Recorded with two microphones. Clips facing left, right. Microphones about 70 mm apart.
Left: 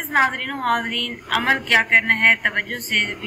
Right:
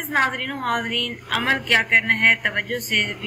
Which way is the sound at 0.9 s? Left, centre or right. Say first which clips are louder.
Left 1 dB; centre.